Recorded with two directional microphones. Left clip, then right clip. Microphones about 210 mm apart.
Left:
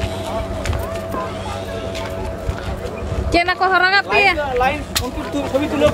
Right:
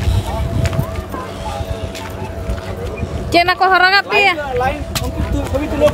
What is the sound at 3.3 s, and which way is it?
Speech, 25° right (ahead or behind).